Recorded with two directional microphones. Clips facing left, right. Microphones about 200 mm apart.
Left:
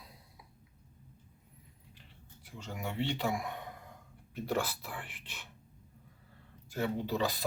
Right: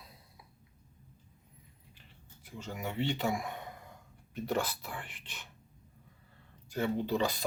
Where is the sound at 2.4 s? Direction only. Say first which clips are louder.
Right 1 dB; centre (ahead or behind).